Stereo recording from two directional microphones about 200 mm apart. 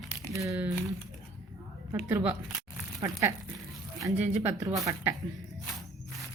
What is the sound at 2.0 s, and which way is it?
Speech, 10° right (ahead or behind).